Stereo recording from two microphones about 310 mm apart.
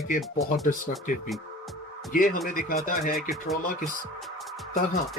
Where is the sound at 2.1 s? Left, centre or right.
Left.